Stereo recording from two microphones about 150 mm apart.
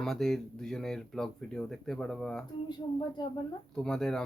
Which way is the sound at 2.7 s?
30° left (ahead or behind).